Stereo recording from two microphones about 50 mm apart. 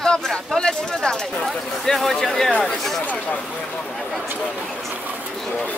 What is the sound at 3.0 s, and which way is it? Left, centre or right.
Speech, left.